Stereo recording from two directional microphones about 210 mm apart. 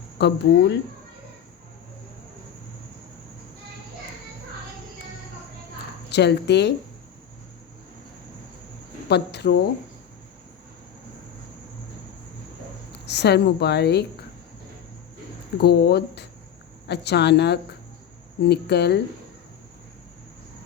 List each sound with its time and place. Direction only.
0.2 s a woman's voice: 55° left (ahead or behind)
6.1 s a woman's voice: 55° left (ahead or behind)
9.0 s a woman's voice: 50° left (ahead or behind)
12.9 s speech: 55° left (ahead or behind)
15.5 s a woman's voice: 50° left (ahead or behind)